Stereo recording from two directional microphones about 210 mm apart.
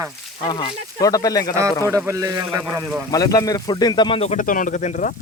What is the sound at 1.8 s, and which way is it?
Speech, 15° right (ahead or behind).